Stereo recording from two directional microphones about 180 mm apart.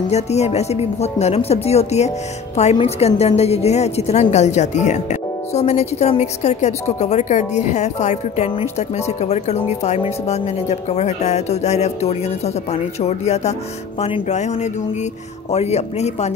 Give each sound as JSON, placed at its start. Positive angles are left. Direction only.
{"t": 0.1, "sound": "a woman's voice", "side_deg": 35}